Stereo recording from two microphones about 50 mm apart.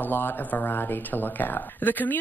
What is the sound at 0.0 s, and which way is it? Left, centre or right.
Speech, left.